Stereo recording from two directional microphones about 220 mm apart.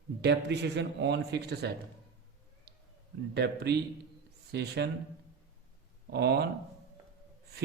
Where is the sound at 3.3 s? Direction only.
50° right (ahead or behind).